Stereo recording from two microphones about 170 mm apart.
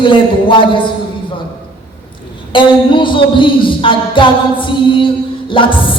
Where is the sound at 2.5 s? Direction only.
30° left (ahead or behind).